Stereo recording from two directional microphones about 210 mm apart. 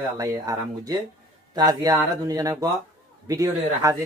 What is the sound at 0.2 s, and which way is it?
Speech, 15° right (ahead or behind).